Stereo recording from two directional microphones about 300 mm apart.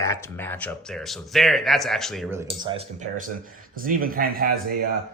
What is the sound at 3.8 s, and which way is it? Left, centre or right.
Speech, right.